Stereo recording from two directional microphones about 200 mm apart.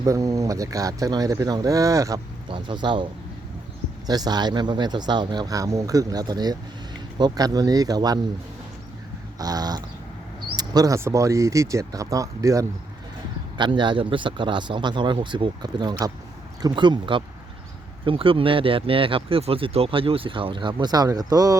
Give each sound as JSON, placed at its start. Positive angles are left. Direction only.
{"t": 0.0, "sound": "speech", "side_deg": -15}
{"t": 9.4, "sound": "speech", "side_deg": -20}